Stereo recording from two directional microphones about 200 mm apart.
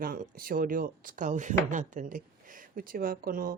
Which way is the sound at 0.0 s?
45° right (ahead or behind).